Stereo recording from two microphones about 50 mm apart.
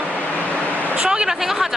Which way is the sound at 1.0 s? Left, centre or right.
Centre.